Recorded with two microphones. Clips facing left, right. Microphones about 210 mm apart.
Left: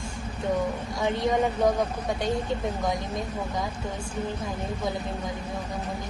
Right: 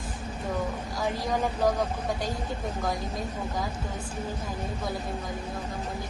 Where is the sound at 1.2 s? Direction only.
Centre (ahead or behind).